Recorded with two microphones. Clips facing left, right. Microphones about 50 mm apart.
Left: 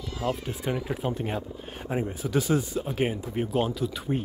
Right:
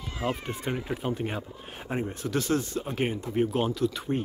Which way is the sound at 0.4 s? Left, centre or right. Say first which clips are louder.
Left 2 dB; centre.